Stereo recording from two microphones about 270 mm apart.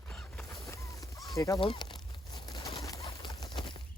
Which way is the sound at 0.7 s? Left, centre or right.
Centre.